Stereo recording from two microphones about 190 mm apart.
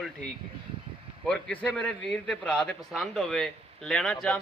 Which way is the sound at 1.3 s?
5° left (ahead or behind).